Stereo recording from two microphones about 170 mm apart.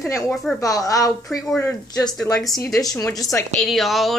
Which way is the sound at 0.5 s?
20° left (ahead or behind).